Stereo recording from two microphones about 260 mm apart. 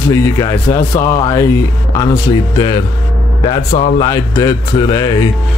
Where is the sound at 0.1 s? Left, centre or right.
Centre.